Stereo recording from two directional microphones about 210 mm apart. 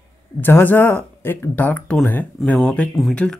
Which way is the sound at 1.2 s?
10° left (ahead or behind).